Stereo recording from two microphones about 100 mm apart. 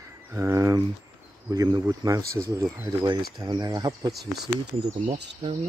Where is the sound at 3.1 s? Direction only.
45° right (ahead or behind).